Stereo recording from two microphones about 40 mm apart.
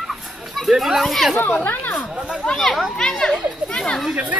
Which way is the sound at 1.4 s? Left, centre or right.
Left.